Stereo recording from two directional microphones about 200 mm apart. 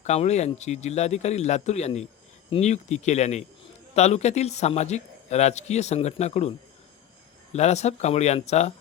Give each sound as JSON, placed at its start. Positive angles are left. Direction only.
{"t": 0.0, "sound": "a man's voice", "side_deg": 35}
{"t": 7.5, "sound": "a man's voice", "side_deg": 35}